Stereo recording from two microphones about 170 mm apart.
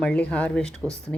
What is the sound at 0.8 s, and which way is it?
Speech, 15° right (ahead or behind).